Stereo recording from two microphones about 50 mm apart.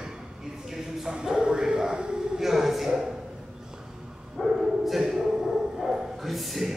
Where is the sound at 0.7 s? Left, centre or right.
Centre.